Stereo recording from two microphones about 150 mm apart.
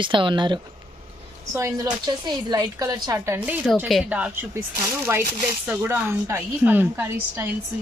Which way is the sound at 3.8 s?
5° right (ahead or behind).